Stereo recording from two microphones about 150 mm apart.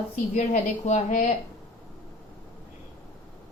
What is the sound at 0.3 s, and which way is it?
Speech, 50° left (ahead or behind).